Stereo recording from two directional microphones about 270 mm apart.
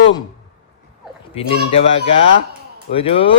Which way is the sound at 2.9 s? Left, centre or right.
Centre.